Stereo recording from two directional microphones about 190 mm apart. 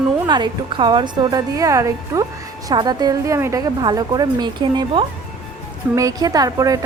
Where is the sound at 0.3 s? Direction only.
25° right (ahead or behind).